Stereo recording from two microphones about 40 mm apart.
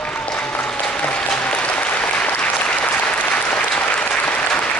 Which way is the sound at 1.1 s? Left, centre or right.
Left.